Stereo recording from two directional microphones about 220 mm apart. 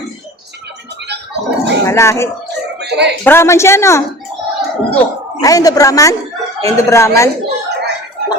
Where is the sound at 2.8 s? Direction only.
50° right (ahead or behind).